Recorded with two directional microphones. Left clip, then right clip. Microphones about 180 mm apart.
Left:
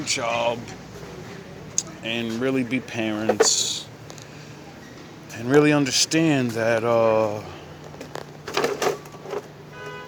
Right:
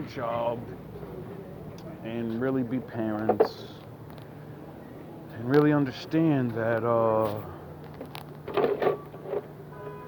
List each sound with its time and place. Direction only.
0.0 s speech: 35° left (ahead or behind)
1.8 s speech: 35° left (ahead or behind)
5.5 s speech: 35° left (ahead or behind)
8.5 s printer: 15° left (ahead or behind)